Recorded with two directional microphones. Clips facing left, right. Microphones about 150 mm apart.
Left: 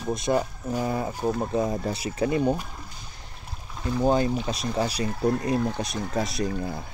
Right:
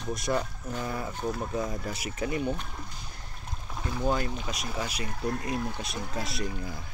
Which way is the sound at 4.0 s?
30° left (ahead or behind).